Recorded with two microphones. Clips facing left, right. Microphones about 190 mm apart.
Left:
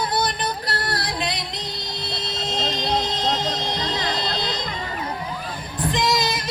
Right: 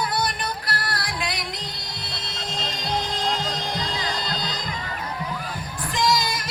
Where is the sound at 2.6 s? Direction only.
25° left (ahead or behind).